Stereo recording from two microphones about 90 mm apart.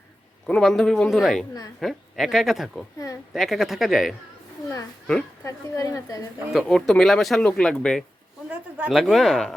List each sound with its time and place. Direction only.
0.4 s speech: 5° left (ahead or behind)
5.4 s a woman's voice: 35° left (ahead or behind)
6.5 s speech: 10° left (ahead or behind)